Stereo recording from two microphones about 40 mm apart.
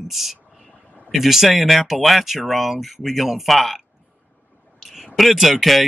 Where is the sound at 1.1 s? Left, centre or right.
Centre.